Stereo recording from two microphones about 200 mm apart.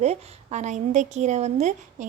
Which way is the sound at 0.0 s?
35° right (ahead or behind).